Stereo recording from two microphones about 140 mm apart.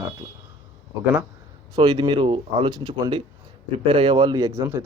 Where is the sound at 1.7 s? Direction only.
30° right (ahead or behind).